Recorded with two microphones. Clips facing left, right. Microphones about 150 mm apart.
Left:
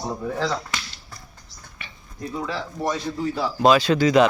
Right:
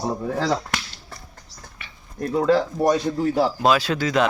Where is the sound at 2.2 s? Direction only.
60° right (ahead or behind).